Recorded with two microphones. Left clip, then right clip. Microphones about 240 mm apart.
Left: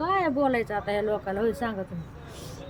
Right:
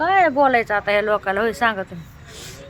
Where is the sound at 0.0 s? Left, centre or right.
Centre.